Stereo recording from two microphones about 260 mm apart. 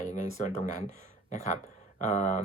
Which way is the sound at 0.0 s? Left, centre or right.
Left.